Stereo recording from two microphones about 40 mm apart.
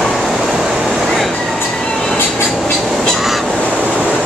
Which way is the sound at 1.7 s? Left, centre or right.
Centre.